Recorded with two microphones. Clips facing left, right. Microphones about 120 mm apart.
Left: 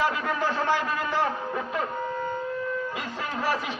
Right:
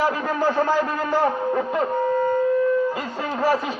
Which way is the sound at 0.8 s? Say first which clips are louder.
Right 6 dB; 30° right (ahead or behind).